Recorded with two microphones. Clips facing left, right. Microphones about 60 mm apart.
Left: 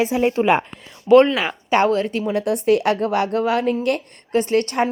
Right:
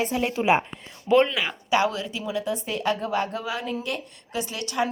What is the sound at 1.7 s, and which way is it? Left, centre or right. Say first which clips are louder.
Speech: left 6 dB; left.